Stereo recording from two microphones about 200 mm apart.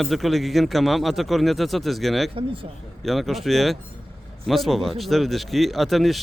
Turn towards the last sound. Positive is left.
turn(degrees=0)  # may be behind; listen again after turning